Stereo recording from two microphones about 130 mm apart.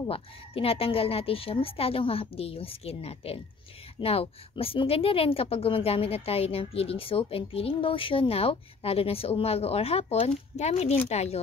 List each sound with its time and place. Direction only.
0.1 s speech: 45° left (ahead or behind)